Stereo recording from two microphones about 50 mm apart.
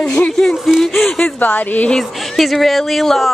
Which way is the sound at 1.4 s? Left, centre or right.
Left.